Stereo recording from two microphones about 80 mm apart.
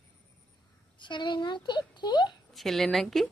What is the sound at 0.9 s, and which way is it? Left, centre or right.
A woman's voice, left.